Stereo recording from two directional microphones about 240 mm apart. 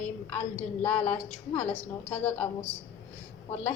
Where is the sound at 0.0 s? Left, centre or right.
Centre.